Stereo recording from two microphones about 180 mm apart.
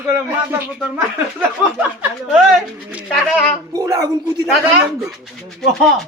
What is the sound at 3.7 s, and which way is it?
Speech, 15° right (ahead or behind).